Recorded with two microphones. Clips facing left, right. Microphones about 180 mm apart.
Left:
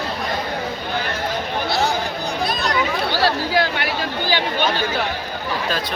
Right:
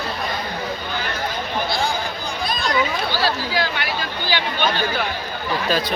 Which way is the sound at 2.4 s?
70° left (ahead or behind).